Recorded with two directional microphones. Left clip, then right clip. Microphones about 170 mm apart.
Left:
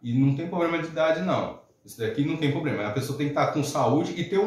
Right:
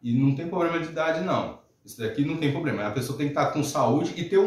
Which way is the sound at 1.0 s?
20° right (ahead or behind).